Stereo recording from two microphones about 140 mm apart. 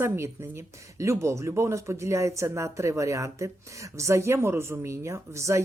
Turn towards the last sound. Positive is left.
turn(degrees=-20)  # may be behind; listen again after turning